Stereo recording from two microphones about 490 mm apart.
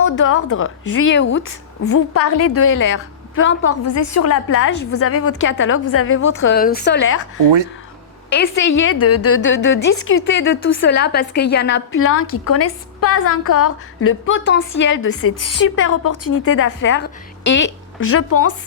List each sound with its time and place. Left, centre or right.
0.0 s a woman's voice: left
7.3 s speech: right
8.3 s a woman's voice: left